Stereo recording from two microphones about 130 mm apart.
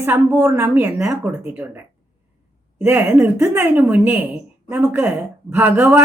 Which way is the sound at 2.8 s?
15° right (ahead or behind).